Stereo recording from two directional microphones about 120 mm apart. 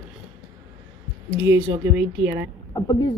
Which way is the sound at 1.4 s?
15° right (ahead or behind).